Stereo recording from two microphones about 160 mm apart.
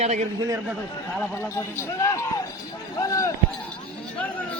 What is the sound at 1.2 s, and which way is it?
Speech, 15° left (ahead or behind).